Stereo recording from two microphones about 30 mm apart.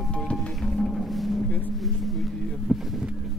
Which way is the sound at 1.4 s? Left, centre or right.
Left.